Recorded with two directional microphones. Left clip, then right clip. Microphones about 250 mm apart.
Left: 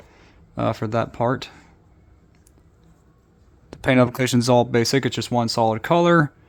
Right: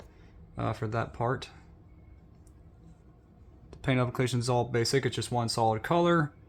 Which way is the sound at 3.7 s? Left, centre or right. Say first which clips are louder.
Left 12 dB; left.